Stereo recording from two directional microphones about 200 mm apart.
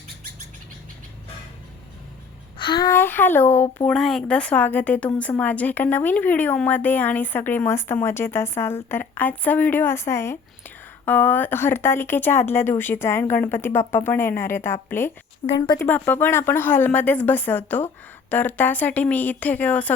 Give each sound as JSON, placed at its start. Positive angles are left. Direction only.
{"t": 2.6, "sound": "speech", "side_deg": 20}
{"t": 15.4, "sound": "speech", "side_deg": 20}
{"t": 15.9, "sound": "speech", "side_deg": 10}